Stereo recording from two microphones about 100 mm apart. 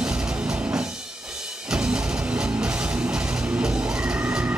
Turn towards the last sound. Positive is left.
turn(degrees=-15)  # may be behind; listen again after turning